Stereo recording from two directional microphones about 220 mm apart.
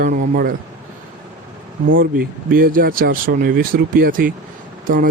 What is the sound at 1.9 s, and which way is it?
Speech, 40° right (ahead or behind).